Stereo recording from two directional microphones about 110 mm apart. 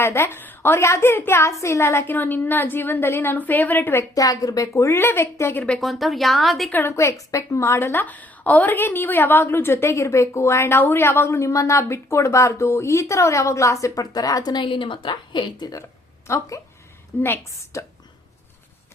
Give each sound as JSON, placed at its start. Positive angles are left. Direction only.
{"t": 0.0, "sound": "a woman's voice", "side_deg": 20}
{"t": 4.1, "sound": "a woman's voice", "side_deg": 30}
{"t": 5.6, "sound": "a woman's voice", "side_deg": 5}
{"t": 6.7, "sound": "a woman's voice", "side_deg": 15}
{"t": 6.9, "sound": "a woman's voice", "side_deg": 30}
{"t": 16.2, "sound": "a woman's voice", "side_deg": 25}